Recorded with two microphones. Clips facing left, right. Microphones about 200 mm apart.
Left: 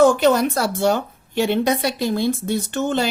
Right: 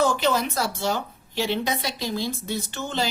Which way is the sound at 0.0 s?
50° left (ahead or behind).